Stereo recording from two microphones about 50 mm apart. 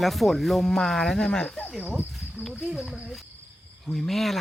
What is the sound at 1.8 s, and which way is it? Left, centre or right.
Speech, right.